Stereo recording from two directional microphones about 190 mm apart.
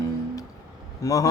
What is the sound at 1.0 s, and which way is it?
Speech, 15° left (ahead or behind).